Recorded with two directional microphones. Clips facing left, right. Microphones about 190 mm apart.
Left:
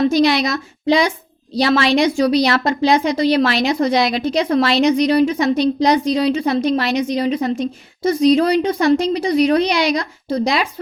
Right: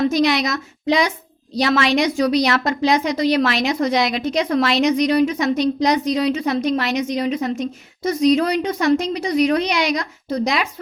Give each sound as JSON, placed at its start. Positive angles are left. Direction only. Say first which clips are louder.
{"t": 0.0, "sound": "a woman's voice", "louder": "left 3 dB", "side_deg": 30}